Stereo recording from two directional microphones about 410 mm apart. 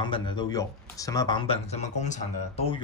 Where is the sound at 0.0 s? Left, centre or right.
Centre.